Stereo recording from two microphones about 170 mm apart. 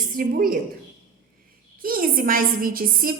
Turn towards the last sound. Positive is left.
turn(degrees=-60)  # may be behind; listen again after turning